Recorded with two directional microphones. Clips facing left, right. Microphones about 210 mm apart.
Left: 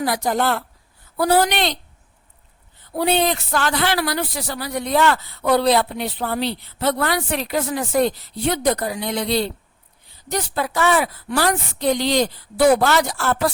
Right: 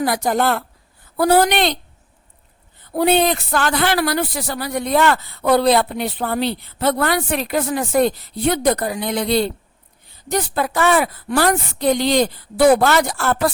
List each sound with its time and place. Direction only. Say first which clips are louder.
0.0 s speech: right 2 dB; 55° right (ahead or behind)
2.9 s speech: right 3 dB; 50° right (ahead or behind)